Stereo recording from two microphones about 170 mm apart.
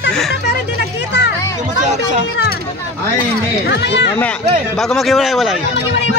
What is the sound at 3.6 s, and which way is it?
Speech, 90° left.